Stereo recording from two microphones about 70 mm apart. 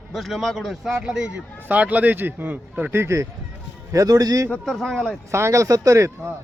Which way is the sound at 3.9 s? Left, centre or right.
Right.